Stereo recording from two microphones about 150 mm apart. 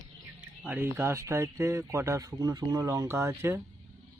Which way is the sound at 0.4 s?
10° right (ahead or behind).